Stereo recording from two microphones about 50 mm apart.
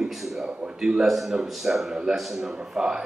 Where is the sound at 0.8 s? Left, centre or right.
Centre.